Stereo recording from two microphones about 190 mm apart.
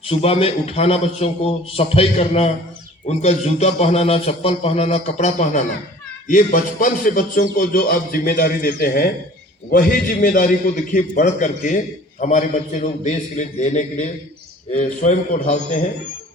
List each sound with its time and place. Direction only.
0.0 s a man's voice: 30° left (ahead or behind)